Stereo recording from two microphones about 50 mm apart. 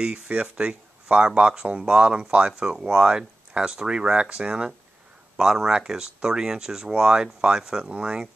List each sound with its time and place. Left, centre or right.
0.3 s speech: centre